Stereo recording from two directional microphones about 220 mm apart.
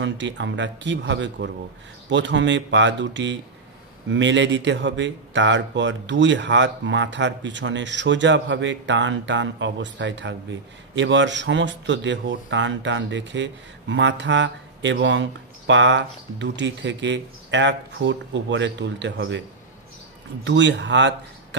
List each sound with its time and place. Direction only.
0.0 s speech: 55° right (ahead or behind)
20.4 s speech: 55° right (ahead or behind)